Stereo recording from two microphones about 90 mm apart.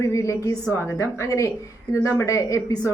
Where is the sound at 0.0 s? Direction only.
35° left (ahead or behind).